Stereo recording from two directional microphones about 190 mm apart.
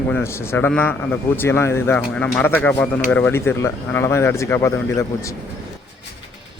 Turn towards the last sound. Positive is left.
turn(degrees=15)  # may be behind; listen again after turning